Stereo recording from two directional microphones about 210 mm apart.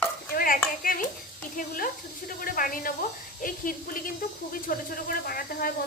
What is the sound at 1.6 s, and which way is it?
Speech, 40° left (ahead or behind).